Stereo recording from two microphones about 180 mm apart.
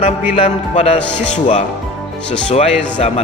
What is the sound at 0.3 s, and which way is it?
Speech, 40° left (ahead or behind).